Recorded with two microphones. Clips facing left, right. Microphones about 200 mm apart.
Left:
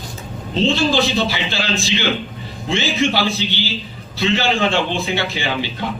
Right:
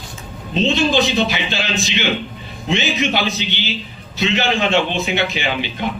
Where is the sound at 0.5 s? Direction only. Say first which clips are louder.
Even; 20° right (ahead or behind).